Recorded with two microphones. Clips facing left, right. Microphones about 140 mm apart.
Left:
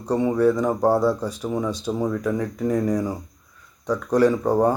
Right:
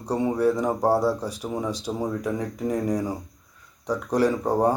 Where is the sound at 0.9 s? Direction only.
35° right (ahead or behind).